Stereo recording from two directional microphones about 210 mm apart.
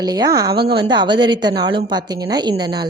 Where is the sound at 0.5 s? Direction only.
50° right (ahead or behind).